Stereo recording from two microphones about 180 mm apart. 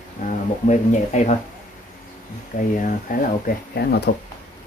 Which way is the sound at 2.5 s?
50° left (ahead or behind).